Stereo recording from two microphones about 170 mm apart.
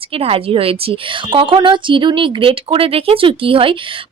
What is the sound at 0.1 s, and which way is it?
A woman's voice, 35° right (ahead or behind).